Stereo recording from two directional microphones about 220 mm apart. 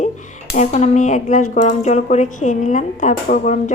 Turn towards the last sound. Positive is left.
turn(degrees=35)  # may be behind; listen again after turning